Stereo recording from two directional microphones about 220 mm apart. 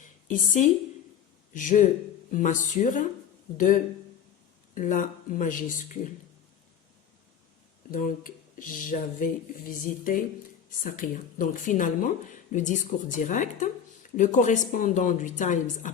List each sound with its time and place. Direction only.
0.3 s speech: 35° left (ahead or behind)
4.7 s speech: 35° left (ahead or behind)
7.9 s speech: 40° left (ahead or behind)